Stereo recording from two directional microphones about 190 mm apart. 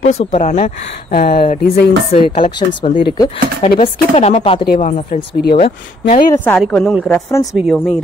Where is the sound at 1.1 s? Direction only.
50° left (ahead or behind).